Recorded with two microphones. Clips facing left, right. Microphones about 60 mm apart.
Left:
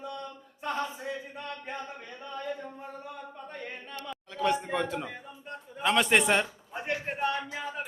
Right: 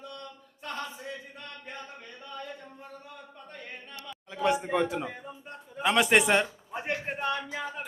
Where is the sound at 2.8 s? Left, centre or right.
Centre.